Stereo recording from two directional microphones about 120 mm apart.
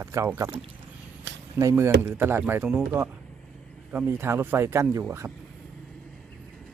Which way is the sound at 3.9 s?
15° right (ahead or behind).